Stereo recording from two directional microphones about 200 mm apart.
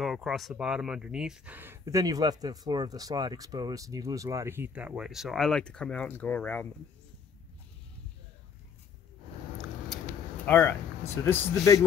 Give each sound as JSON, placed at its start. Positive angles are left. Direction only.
{"t": 0.0, "sound": "speech", "side_deg": 0}
{"t": 10.4, "sound": "a man's voice", "side_deg": 10}